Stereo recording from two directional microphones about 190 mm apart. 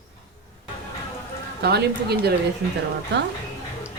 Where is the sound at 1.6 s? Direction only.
55° right (ahead or behind).